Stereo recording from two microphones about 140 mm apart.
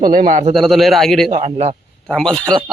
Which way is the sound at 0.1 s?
70° right (ahead or behind).